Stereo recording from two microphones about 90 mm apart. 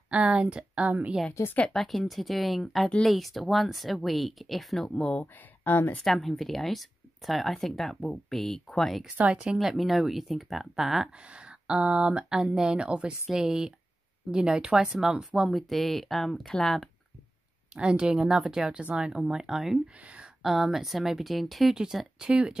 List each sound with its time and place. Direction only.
0.1 s speech: 10° right (ahead or behind)
1.7 s speech: 5° left (ahead or behind)
5.2 s speech: 20° left (ahead or behind)
6.0 s speech: centre (ahead or behind)
9.1 s speech: 15° right (ahead or behind); by 16.9 s 5° left (ahead or behind)
17.7 s speech: 10° right (ahead or behind)